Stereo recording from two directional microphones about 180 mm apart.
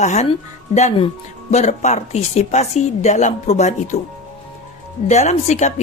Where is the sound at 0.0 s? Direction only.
40° left (ahead or behind).